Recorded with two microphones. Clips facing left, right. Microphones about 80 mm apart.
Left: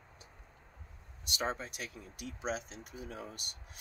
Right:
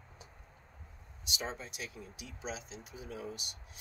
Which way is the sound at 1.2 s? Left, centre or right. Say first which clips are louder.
Left 4 dB; left.